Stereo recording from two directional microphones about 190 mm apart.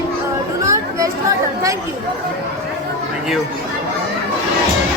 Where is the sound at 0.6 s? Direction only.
15° right (ahead or behind).